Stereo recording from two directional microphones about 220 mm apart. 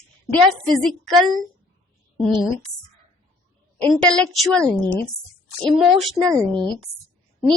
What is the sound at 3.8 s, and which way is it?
Speech, 5° left (ahead or behind).